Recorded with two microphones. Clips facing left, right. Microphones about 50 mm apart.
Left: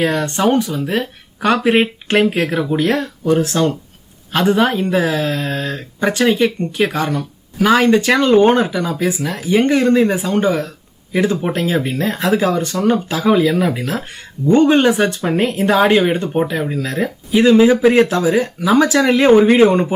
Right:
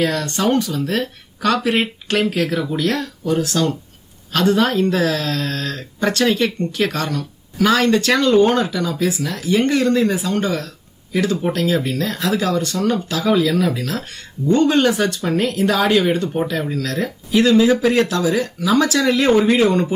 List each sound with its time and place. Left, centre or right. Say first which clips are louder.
0.0 s speech: left 3 dB; left